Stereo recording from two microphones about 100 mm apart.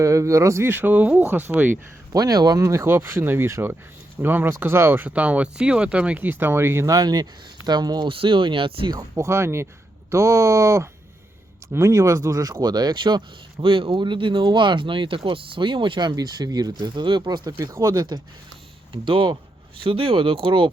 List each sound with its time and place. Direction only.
0.0 s speech: 30° right (ahead or behind)
2.1 s speech: 40° right (ahead or behind)
2.6 s speech: 25° right (ahead or behind); by 8.1 s 45° right (ahead or behind)
8.1 s speech: 60° right (ahead or behind)
9.1 s speech: 30° right (ahead or behind)
19.0 s speech: 60° right (ahead or behind)